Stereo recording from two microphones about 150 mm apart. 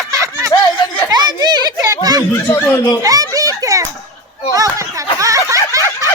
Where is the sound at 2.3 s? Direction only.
15° left (ahead or behind).